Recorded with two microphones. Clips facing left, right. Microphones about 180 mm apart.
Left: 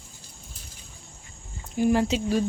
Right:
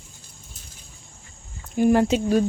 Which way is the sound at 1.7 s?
55° right (ahead or behind).